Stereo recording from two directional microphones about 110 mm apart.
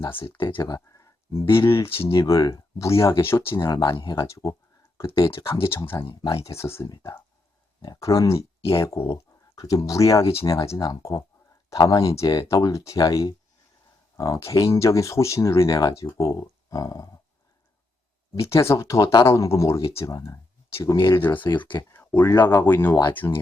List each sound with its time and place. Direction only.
0.2 s speech: 50° left (ahead or behind)
0.6 s a sound: 35° left (ahead or behind)
1.5 s speech: 25° left (ahead or behind)
3.5 s speech: 35° left (ahead or behind)
3.8 s speech: 45° left (ahead or behind); by 4.5 s 30° left (ahead or behind)
6.2 s speech: 30° left (ahead or behind)
6.8 s speech: 35° left (ahead or behind)
18.3 s speech: 25° left (ahead or behind)
20.9 s speech: 40° left (ahead or behind)
21.2 s speech: 20° left (ahead or behind)